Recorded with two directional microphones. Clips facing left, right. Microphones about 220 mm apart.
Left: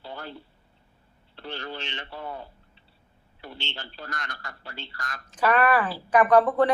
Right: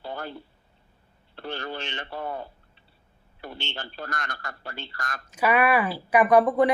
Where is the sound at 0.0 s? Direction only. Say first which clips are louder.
Right 4 dB; 50° right (ahead or behind).